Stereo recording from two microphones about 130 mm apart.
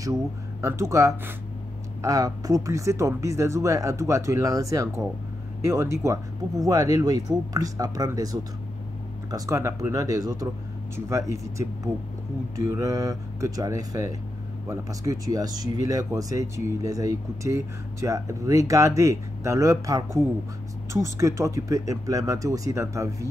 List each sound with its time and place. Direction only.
0.0 s speech: 25° right (ahead or behind)